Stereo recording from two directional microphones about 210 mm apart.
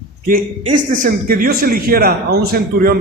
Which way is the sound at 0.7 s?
40° right (ahead or behind).